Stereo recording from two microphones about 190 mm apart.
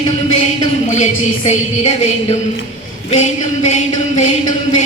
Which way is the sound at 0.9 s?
35° left (ahead or behind).